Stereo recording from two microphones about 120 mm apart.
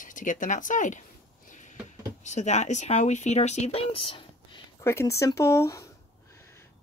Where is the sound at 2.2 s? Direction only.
75° left (ahead or behind); by 4.6 s 50° left (ahead or behind).